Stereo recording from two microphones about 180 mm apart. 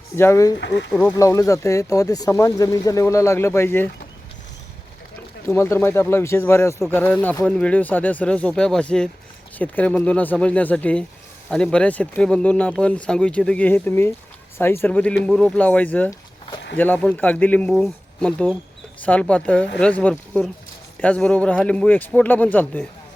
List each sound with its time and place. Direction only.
0.2 s speech: 15° left (ahead or behind)
0.6 s speech: 80° left
1.1 s speech: 20° left (ahead or behind)
5.5 s speech: 15° left (ahead or behind)